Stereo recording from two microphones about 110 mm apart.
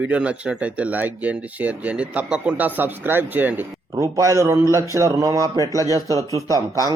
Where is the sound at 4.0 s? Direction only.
30° right (ahead or behind).